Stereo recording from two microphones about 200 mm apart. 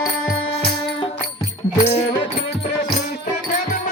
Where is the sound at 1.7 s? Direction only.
35° left (ahead or behind).